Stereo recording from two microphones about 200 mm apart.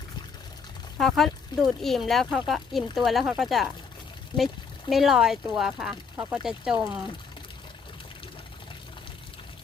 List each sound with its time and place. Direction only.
0.9 s speech: centre (ahead or behind)
4.3 s a woman's voice: 25° left (ahead or behind)
4.9 s speech: centre (ahead or behind)